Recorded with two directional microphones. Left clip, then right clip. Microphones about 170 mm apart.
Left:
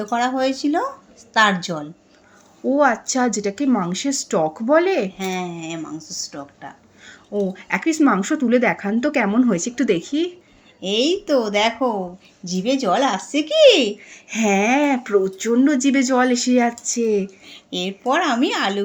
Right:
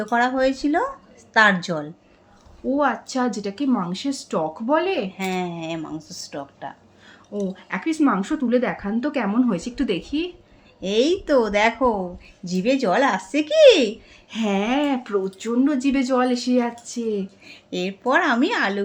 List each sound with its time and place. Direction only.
0.1 s speech: 20° right (ahead or behind)
2.6 s speech: 20° left (ahead or behind)
5.1 s speech: 20° right (ahead or behind)
7.3 s speech: 25° left (ahead or behind)
10.8 s speech: 20° right (ahead or behind)
14.3 s speech: 25° left (ahead or behind)
17.7 s speech: 20° right (ahead or behind)